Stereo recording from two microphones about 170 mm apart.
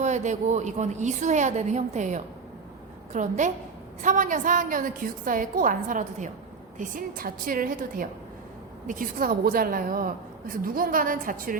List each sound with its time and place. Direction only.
0.0 s a woman's voice: 45° right (ahead or behind)